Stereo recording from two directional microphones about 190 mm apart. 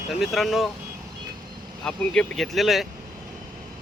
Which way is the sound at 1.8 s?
5° left (ahead or behind).